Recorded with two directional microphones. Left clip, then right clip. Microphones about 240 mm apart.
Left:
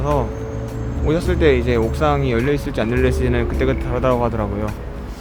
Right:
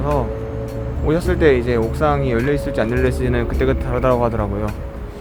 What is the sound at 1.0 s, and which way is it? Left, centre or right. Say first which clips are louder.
Speech: right 1 dB; centre.